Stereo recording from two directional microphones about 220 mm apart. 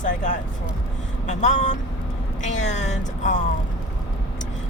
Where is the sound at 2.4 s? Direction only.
35° left (ahead or behind).